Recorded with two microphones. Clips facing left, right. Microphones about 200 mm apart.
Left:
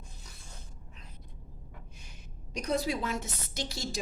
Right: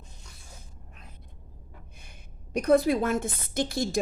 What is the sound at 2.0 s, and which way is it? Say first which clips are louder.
A woman's voice: even; 55° right (ahead or behind).